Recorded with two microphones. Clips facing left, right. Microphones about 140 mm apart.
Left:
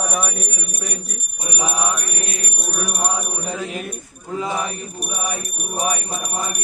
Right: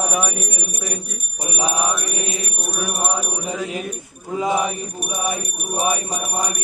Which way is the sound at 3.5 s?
10° right (ahead or behind).